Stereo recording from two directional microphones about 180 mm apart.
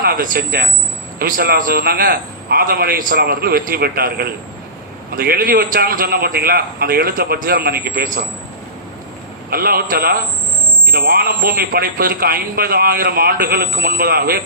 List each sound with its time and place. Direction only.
0.0 s a man's voice: 55° right (ahead or behind)
9.5 s a man's voice: 55° right (ahead or behind)